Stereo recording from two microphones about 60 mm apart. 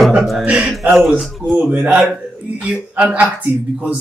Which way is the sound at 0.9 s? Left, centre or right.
Centre.